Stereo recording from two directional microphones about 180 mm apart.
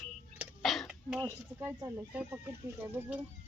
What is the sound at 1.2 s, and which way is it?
Speech, 15° right (ahead or behind).